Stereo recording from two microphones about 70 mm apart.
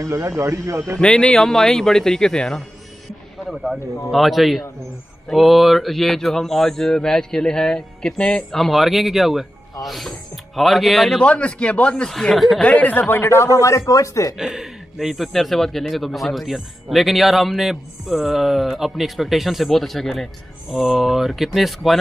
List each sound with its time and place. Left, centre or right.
0.0 s a man's voice: right
0.9 s speech: centre
3.4 s speech: centre
11.1 s speech: centre
12.1 s speech: centre
12.6 s speech: left
13.1 s speech: left
14.3 s speech: centre